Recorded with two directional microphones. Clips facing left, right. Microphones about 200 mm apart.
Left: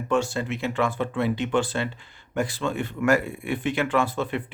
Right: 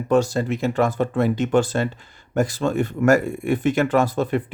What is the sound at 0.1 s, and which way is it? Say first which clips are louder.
A man's voice: right 6 dB; 40° right (ahead or behind).